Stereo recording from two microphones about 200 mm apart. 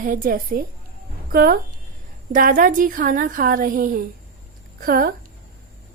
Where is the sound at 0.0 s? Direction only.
45° right (ahead or behind).